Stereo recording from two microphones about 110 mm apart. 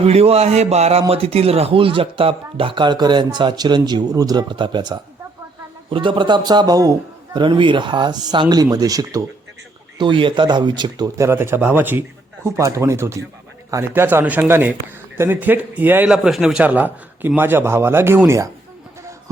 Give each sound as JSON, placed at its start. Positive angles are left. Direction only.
{"t": 0.0, "sound": "a man's voice", "side_deg": -65}
{"t": 10.0, "sound": "a man's voice", "side_deg": -45}
{"t": 11.2, "sound": "a man's voice", "side_deg": -20}
{"t": 16.0, "sound": "a man's voice", "side_deg": -5}